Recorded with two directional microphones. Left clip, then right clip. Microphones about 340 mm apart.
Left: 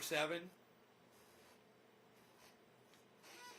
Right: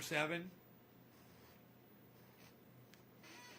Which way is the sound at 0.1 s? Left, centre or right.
Right.